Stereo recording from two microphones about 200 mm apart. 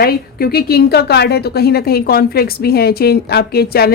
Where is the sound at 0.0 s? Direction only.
50° left (ahead or behind).